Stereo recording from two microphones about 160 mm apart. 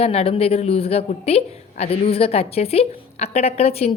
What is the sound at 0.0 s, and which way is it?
A woman's voice, 40° left (ahead or behind).